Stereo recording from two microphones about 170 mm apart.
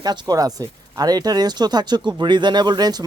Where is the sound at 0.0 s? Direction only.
25° right (ahead or behind).